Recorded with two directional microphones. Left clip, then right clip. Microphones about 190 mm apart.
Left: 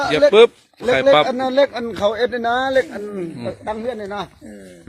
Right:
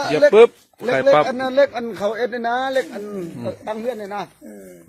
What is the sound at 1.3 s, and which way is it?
A man's voice, 50° left (ahead or behind).